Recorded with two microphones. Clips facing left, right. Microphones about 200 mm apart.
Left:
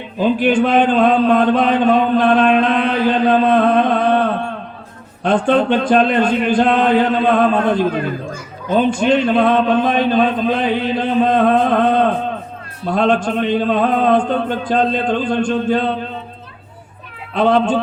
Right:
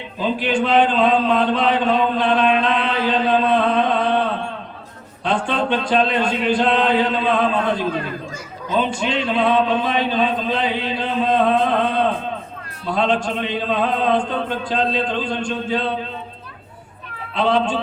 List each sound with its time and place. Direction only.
0.2 s a sound: 50° left (ahead or behind)
5.2 s a man's voice: 50° left (ahead or behind)
17.3 s a man's voice: 50° left (ahead or behind)